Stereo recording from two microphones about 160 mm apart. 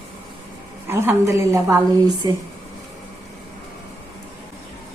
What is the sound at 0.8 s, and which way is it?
A woman's voice, 15° right (ahead or behind).